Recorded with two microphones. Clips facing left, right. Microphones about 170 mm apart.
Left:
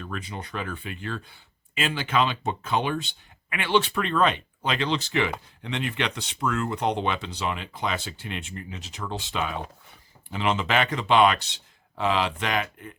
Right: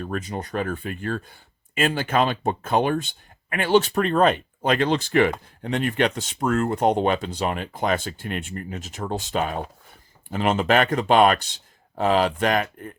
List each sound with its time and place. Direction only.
0.0 s speech: 45° right (ahead or behind)